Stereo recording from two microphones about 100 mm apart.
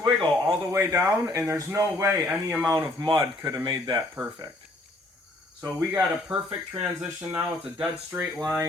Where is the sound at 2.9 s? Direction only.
35° right (ahead or behind).